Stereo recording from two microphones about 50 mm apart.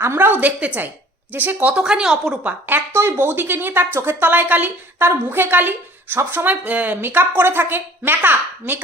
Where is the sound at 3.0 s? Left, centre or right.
Right.